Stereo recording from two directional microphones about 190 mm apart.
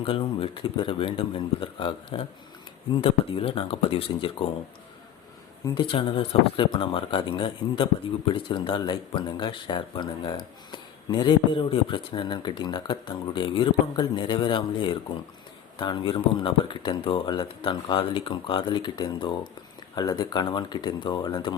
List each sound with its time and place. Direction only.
0.0 s speech: 30° left (ahead or behind)
5.6 s speech: 25° left (ahead or behind)